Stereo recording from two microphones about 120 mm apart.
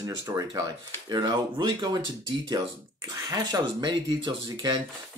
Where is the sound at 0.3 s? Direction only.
30° right (ahead or behind).